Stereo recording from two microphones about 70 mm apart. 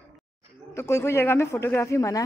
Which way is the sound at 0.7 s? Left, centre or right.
Left.